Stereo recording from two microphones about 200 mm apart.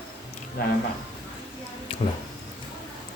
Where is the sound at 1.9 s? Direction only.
25° left (ahead or behind).